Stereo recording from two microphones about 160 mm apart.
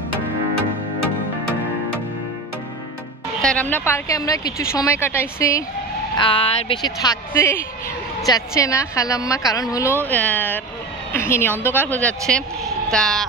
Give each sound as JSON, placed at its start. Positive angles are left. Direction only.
{"t": 3.4, "sound": "speech", "side_deg": 10}
{"t": 6.1, "sound": "a woman's voice", "side_deg": 30}
{"t": 10.0, "sound": "speech", "side_deg": 10}